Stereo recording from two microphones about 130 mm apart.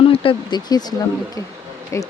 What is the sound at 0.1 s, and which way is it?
Speech, 45° left (ahead or behind).